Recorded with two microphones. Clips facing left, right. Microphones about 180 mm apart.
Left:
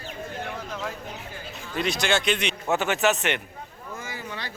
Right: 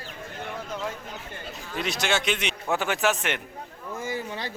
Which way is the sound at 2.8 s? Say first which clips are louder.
Left 2 dB; 20° left (ahead or behind).